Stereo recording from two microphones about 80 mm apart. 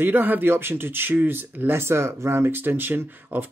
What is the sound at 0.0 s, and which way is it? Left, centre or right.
Speech, right.